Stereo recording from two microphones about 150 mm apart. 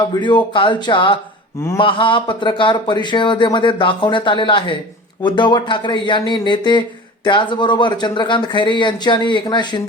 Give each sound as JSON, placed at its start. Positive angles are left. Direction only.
{"t": 0.1, "sound": "speech", "side_deg": 30}